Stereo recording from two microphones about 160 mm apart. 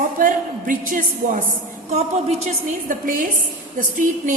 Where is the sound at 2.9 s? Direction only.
55° right (ahead or behind).